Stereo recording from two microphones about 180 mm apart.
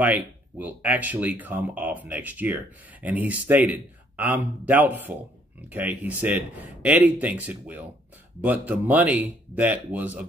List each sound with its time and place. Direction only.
0.0 s speech: 10° right (ahead or behind)